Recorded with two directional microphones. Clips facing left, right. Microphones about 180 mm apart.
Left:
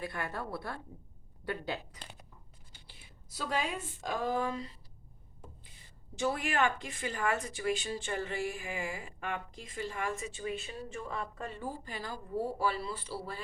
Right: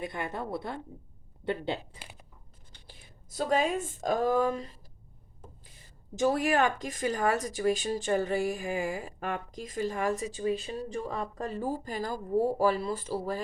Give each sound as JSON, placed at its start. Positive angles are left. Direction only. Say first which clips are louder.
{"t": 0.0, "sound": "a woman's voice", "louder": "right 3 dB", "side_deg": -20}
{"t": 2.0, "sound": "a sound", "louder": "right 1 dB", "side_deg": -5}
{"t": 2.8, "sound": "a woman's voice", "louder": "right 6 dB", "side_deg": -50}
{"t": 6.1, "sound": "speech", "louder": "right 6 dB", "side_deg": -40}